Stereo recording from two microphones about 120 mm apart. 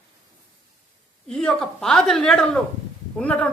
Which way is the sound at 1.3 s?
5° left (ahead or behind).